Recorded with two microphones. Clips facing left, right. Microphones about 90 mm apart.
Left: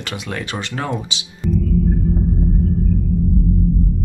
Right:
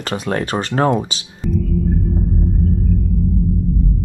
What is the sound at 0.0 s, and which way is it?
Speech, 40° right (ahead or behind).